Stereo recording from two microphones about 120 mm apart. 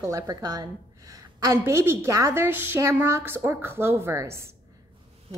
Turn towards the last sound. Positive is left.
turn(degrees=-25)  # may be behind; listen again after turning